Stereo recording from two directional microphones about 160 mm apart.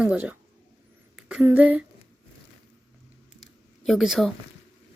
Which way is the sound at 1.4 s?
10° right (ahead or behind).